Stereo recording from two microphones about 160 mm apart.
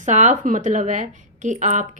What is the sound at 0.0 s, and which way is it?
Speech, 50° right (ahead or behind).